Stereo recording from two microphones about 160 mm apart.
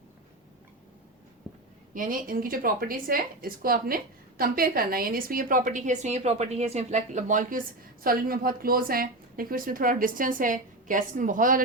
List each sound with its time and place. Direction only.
1.9 s a woman's voice: 60° right (ahead or behind)